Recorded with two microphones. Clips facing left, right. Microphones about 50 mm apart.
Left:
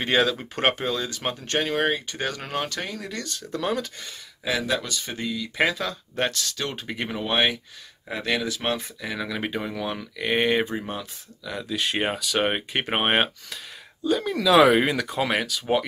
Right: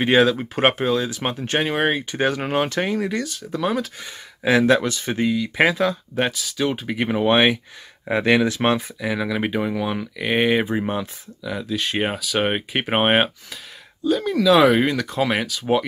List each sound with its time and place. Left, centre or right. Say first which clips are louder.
0.0 s speech: right 6 dB; centre
3.2 s speech: right 5 dB; centre
4.4 s speech: right 9 dB; right; by 7.1 s centre
7.1 s speech: right 7 dB; right
8.8 s speech: right 6 dB; centre
10.7 s speech: right 7 dB; right
11.4 s speech: right 3 dB; centre